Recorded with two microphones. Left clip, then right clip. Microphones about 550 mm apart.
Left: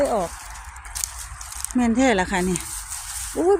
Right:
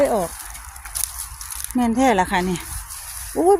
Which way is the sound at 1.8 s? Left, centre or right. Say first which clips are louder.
Right 2 dB; right.